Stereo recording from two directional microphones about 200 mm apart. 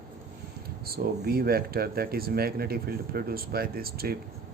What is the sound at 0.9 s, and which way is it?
Speech, 50° right (ahead or behind).